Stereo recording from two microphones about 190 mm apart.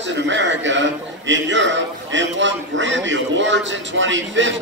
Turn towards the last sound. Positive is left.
turn(degrees=-75)  # may be behind; listen again after turning